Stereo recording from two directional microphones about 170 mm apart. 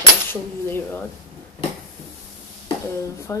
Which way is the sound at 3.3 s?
15° left (ahead or behind).